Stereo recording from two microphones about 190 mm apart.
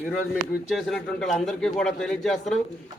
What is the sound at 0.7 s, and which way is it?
A man's voice, centre (ahead or behind).